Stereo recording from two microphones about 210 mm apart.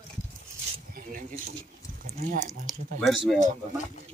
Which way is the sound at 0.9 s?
40° right (ahead or behind).